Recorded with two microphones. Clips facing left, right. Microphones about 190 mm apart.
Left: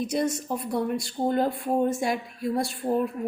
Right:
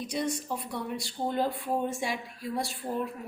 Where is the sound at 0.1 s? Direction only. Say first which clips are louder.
Left 5 dB; 45° left (ahead or behind).